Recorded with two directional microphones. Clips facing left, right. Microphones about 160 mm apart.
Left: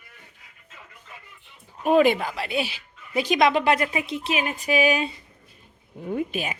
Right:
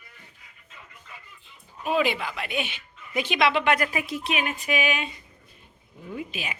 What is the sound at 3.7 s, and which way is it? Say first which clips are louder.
Speech: left 2 dB; 25° left (ahead or behind).